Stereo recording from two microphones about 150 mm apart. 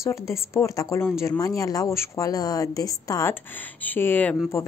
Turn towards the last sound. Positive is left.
turn(degrees=10)  # may be behind; listen again after turning